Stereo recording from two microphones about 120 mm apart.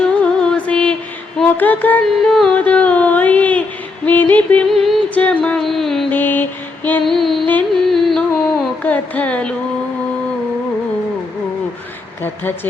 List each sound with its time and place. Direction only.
0.0 s music: 10° left (ahead or behind)
2.6 s a sound: 10° left (ahead or behind)
4.0 s music: 15° left (ahead or behind)
4.7 s music: centre (ahead or behind)
5.0 s music: 10° left (ahead or behind)
6.1 s mantra: 15° left (ahead or behind)
7.0 s a sound: centre (ahead or behind)
7.9 s carnatic music: centre (ahead or behind)
8.8 s carnatic music: 15° left (ahead or behind)
12.2 s music: 15° left (ahead or behind)